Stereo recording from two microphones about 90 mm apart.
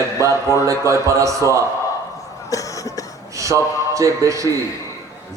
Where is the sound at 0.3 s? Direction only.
40° left (ahead or behind).